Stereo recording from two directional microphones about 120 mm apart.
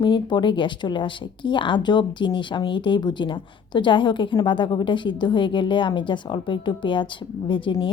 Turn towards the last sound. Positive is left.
turn(degrees=45)  # may be behind; listen again after turning